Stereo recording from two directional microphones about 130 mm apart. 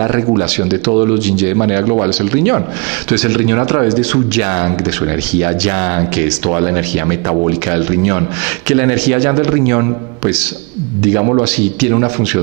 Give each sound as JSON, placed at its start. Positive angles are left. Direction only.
{"t": 0.4, "sound": "speech", "side_deg": -15}
{"t": 11.4, "sound": "speech", "side_deg": -15}